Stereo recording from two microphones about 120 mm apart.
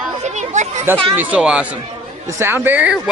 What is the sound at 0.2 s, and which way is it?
Chatter, 80° right.